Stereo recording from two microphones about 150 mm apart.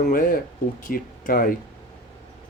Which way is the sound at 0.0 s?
65° left (ahead or behind).